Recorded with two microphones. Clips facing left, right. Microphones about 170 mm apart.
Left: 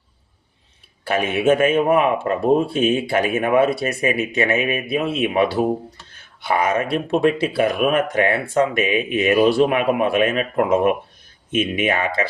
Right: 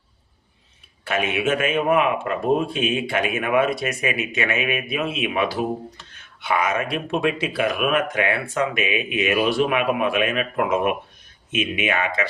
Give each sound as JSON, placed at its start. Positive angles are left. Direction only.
{"t": 1.0, "sound": "speech", "side_deg": 35}